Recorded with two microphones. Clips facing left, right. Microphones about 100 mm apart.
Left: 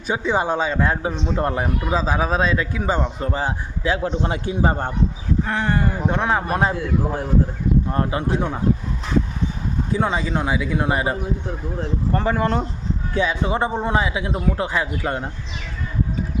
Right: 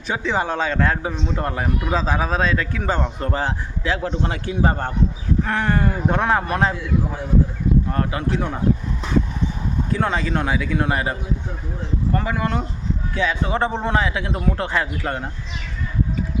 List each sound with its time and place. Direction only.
0.1 s a man's voice: 15° left (ahead or behind)
1.9 s a man's voice: 5° left (ahead or behind)
3.8 s a man's voice: 20° left (ahead or behind)
5.4 s speech: centre (ahead or behind)
6.7 s a man's voice: 45° left (ahead or behind)
7.9 s a man's voice: 25° left (ahead or behind)
9.9 s a man's voice: 15° left (ahead or behind)
12.1 s speech: 35° left (ahead or behind)
13.1 s a man's voice: 20° left (ahead or behind)